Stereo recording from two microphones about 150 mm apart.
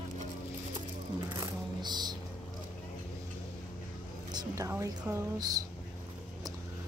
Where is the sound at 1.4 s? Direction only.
30° right (ahead or behind).